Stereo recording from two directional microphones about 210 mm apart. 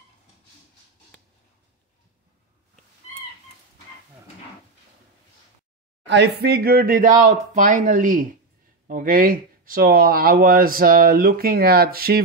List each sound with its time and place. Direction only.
6.0 s speech: 55° right (ahead or behind)